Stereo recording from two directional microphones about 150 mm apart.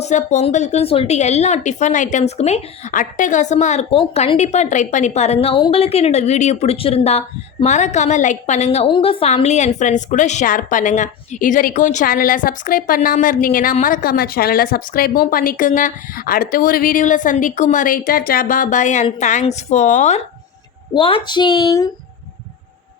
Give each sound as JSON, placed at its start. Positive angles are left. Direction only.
{"t": 0.0, "sound": "a woman's voice", "side_deg": 55}
{"t": 20.9, "sound": "a woman's voice", "side_deg": 35}